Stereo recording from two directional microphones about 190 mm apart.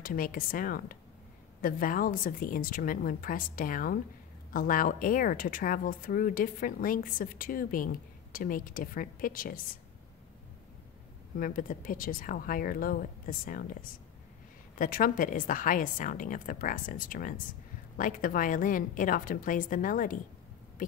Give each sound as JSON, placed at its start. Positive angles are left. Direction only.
{"t": 0.0, "sound": "speech", "side_deg": 50}
{"t": 11.3, "sound": "speech", "side_deg": 45}